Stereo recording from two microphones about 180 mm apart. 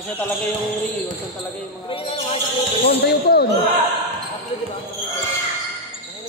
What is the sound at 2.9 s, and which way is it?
Speech, 65° left (ahead or behind).